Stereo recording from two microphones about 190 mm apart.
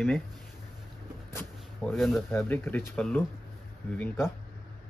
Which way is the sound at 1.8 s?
Centre (ahead or behind).